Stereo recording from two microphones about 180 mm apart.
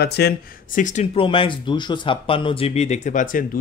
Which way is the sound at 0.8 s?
45° left (ahead or behind).